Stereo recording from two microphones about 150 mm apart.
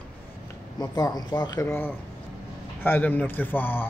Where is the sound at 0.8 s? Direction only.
25° left (ahead or behind).